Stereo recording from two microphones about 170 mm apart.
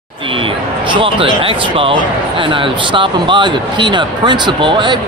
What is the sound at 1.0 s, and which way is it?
Speech, 30° right (ahead or behind).